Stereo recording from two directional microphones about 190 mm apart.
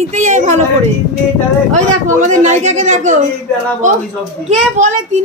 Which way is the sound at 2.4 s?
35° right (ahead or behind).